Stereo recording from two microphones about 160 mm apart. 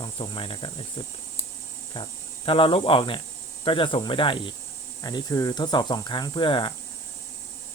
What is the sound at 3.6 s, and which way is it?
Speech, 30° left (ahead or behind).